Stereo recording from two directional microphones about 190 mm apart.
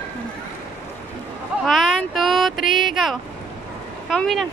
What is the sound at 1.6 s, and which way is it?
Speech, centre (ahead or behind).